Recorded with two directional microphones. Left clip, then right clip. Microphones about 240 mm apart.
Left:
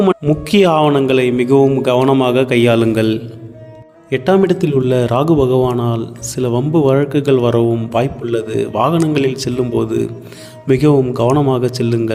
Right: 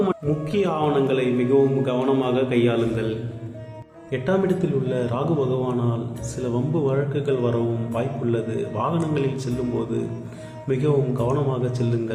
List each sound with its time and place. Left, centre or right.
0.0 s a man's voice: left